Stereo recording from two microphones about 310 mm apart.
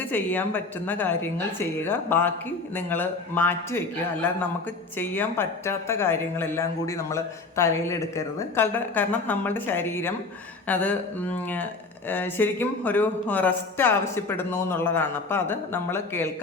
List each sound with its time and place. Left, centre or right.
0.0 s speech: centre